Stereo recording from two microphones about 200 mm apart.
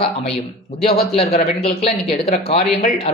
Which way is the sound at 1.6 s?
30° left (ahead or behind).